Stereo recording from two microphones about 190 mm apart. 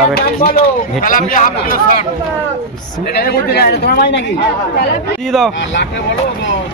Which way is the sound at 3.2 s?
55° left (ahead or behind).